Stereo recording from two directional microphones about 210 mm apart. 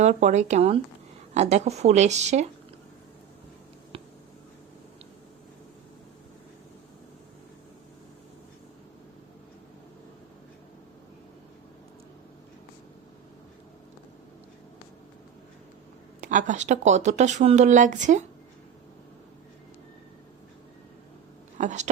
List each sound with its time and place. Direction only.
0.0 s speech: 35° right (ahead or behind)
16.2 s speech: 40° right (ahead or behind)
21.6 s speech: 35° right (ahead or behind)